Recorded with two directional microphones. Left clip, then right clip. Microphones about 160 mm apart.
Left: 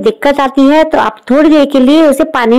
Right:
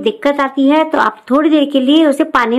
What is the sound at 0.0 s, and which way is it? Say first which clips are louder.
Speech: left 5 dB; 30° left (ahead or behind).